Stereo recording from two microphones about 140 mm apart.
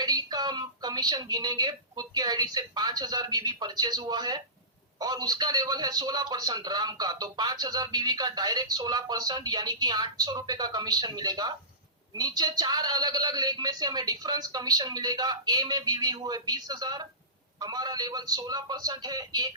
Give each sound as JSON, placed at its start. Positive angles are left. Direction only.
{"t": 0.0, "sound": "a woman's voice", "side_deg": -30}